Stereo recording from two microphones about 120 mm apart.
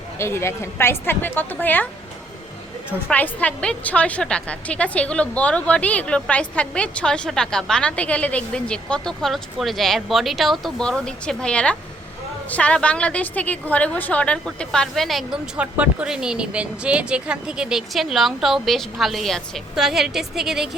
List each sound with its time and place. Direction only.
0.2 s a woman's voice: 20° left (ahead or behind)
3.1 s a woman's voice: 10° left (ahead or behind)
15.5 s speech: 10° right (ahead or behind)